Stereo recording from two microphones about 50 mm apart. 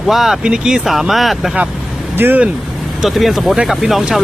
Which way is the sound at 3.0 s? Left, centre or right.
Centre.